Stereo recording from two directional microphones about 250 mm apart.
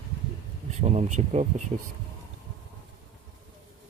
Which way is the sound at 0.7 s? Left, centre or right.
Right.